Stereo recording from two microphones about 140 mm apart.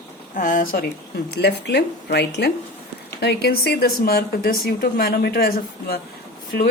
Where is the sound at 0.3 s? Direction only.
80° left.